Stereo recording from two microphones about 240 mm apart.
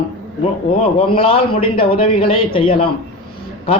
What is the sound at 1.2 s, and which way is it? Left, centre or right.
A man's voice, left.